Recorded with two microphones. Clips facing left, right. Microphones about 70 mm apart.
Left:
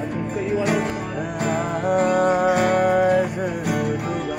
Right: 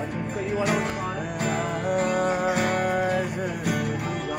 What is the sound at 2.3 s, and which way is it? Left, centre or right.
Music, left.